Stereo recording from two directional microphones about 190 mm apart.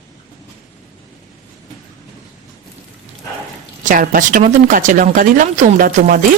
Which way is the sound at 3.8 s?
45° right (ahead or behind).